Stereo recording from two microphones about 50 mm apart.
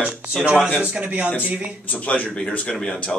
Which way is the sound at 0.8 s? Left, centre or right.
Right.